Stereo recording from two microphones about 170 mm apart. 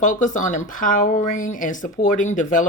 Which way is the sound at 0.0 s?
50° left (ahead or behind).